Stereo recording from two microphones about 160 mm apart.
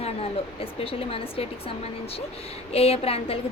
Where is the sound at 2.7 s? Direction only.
40° left (ahead or behind).